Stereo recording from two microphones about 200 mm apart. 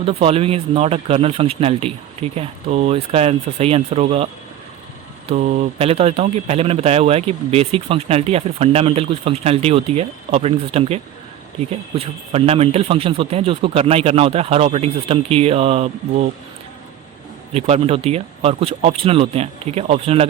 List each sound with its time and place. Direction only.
0.0 s speech: 30° right (ahead or behind)
5.3 s speech: 35° right (ahead or behind)
17.5 s speech: 30° right (ahead or behind)